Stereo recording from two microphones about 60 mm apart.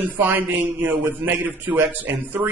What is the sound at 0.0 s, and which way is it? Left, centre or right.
Speech, right.